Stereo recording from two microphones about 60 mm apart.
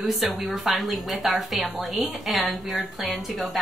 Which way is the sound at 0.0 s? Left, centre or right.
Centre.